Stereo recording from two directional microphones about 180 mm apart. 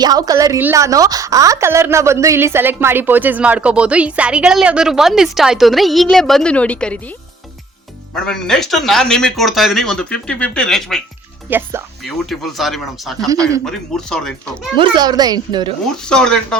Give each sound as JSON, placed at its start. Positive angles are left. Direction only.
{"t": 0.0, "sound": "a woman's voice", "side_deg": -20}
{"t": 8.1, "sound": "speech", "side_deg": 5}
{"t": 11.4, "sound": "a woman's voice", "side_deg": -10}
{"t": 12.0, "sound": "speech", "side_deg": 0}
{"t": 13.3, "sound": "a child's voice", "side_deg": -20}
{"t": 13.7, "sound": "speech", "side_deg": 5}
{"t": 14.8, "sound": "a child's voice", "side_deg": -20}
{"t": 16.0, "sound": "speech", "side_deg": 5}